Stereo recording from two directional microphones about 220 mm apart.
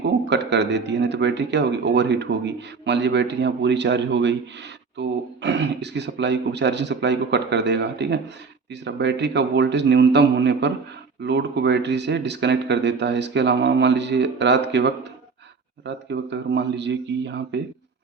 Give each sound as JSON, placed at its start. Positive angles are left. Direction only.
{"t": 0.0, "sound": "speech", "side_deg": -50}